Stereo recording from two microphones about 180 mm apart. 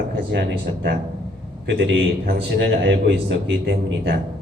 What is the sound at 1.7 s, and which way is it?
A man's voice, 85° right.